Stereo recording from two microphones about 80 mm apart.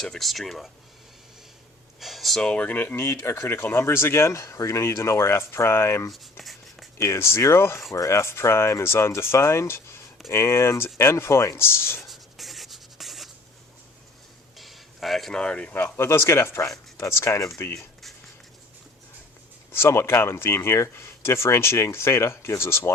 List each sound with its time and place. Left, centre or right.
0.0 s speech: centre
2.0 s speech: centre; by 3.1 s left
3.1 s speech: left
6.4 s writing: centre
7.0 s speech: left
12.0 s writing: centre
14.6 s a sound: centre
15.3 s speech: centre
16.0 s speech: left
19.7 s speech: left